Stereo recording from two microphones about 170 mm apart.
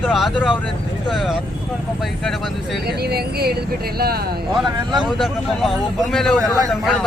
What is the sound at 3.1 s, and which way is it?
Speech, 70° right (ahead or behind).